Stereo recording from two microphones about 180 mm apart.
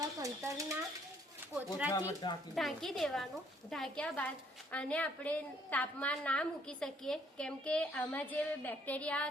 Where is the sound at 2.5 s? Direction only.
Centre (ahead or behind).